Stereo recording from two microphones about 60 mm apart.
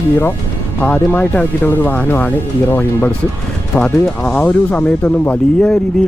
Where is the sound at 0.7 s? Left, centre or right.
Left.